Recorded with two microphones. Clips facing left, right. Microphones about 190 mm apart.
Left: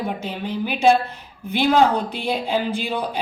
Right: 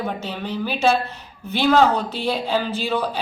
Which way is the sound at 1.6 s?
15° left (ahead or behind).